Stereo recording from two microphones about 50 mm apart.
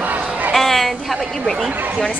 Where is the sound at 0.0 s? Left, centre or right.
Right.